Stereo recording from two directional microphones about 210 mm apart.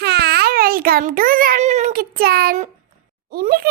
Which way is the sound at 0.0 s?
50° right (ahead or behind).